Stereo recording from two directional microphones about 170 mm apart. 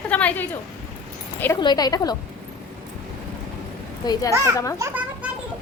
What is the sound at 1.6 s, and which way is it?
Speech, 25° left (ahead or behind).